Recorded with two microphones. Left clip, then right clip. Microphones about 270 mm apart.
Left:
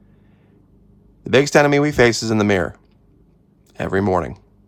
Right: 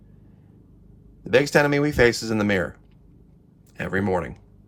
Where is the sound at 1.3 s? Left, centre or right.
Left.